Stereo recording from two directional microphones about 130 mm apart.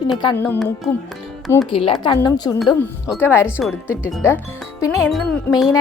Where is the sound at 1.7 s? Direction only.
45° left (ahead or behind).